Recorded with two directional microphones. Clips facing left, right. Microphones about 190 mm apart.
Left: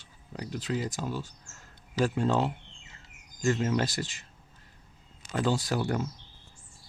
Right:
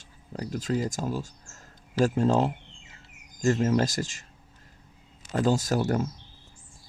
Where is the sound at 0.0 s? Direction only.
45° right (ahead or behind).